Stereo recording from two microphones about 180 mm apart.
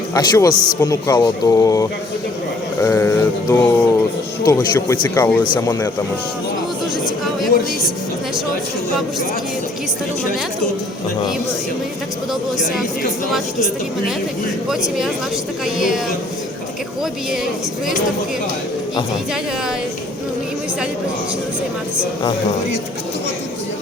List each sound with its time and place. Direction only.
0.1 s speech: 20° left (ahead or behind)
12.3 s speech: centre (ahead or behind)
14.7 s speech: centre (ahead or behind)
17.0 s speech: centre (ahead or behind)